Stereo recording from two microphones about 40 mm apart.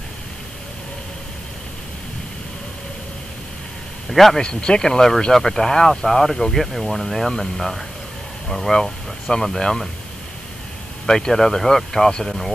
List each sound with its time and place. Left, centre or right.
4.1 s a man's voice: centre
4.4 s speech: left
11.1 s speech: centre